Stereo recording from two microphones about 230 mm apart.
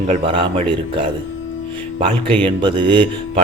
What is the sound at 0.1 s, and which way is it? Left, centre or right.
Speech, right.